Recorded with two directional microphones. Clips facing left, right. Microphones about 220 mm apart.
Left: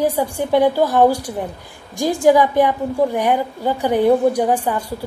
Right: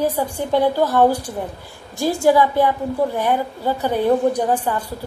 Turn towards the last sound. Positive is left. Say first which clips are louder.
# left 2 dB
turn(degrees=10)  # may be behind; listen again after turning